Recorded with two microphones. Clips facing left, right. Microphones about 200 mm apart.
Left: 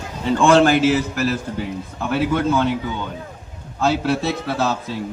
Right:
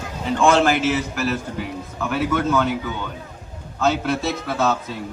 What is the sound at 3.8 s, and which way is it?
A man's voice, 35° left (ahead or behind).